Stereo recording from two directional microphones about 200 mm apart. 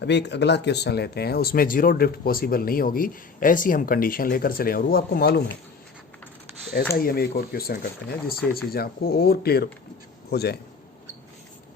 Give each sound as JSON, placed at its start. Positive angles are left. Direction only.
{"t": 0.0, "sound": "speech", "side_deg": 60}
{"t": 6.9, "sound": "speech", "side_deg": 50}